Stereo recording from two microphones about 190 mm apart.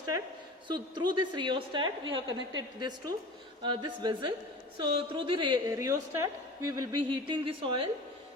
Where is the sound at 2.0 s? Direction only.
75° right (ahead or behind).